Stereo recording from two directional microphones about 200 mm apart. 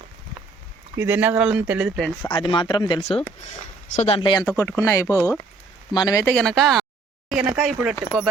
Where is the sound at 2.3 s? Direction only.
25° left (ahead or behind).